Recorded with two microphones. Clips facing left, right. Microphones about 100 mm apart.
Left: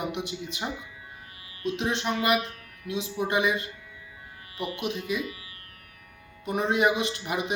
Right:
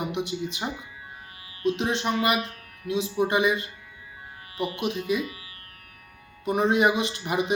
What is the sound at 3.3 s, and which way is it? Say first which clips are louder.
Speech: right 1 dB; centre (ahead or behind).